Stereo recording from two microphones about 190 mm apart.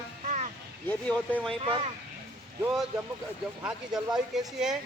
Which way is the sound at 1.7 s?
25° right (ahead or behind).